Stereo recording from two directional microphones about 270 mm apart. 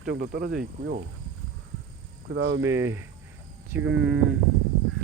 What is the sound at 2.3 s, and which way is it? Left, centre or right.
Speech, right.